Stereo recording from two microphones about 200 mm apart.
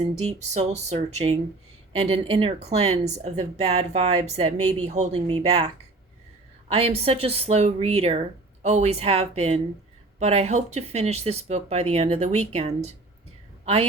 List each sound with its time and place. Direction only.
0.0 s a woman's voice: 30° right (ahead or behind)